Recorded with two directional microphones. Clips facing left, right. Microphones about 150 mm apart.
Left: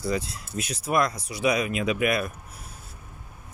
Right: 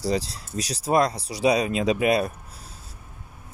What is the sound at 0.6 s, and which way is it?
Speech, 35° right (ahead or behind).